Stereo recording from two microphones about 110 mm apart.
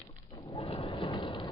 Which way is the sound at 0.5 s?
50° left (ahead or behind).